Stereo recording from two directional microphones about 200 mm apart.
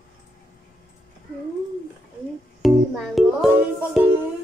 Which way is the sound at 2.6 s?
Centre (ahead or behind).